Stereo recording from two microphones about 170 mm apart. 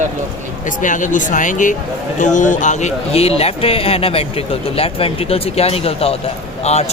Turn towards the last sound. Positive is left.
turn(degrees=40)  # may be behind; listen again after turning